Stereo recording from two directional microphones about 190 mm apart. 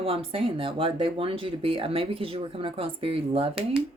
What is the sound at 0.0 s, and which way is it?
A woman's voice, 30° right (ahead or behind).